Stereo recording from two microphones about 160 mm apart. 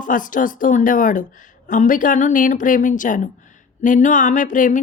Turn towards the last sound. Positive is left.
turn(degrees=55)  # may be behind; listen again after turning